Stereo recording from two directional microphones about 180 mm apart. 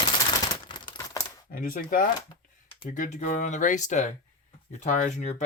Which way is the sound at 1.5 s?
50° left (ahead or behind).